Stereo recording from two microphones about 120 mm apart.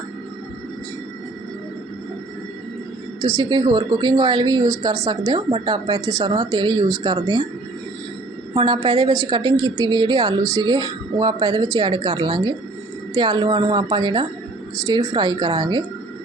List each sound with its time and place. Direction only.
3.2 s speech: 30° right (ahead or behind)
5.5 s speech: 40° right (ahead or behind)
8.5 s speech: 40° right (ahead or behind)